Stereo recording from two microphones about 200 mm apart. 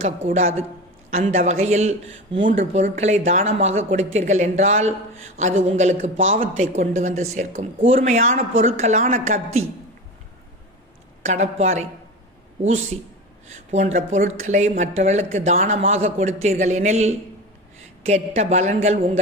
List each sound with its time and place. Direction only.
0.3 s speech: 35° right (ahead or behind)
11.3 s speech: 35° right (ahead or behind)
13.5 s speech: 35° right (ahead or behind)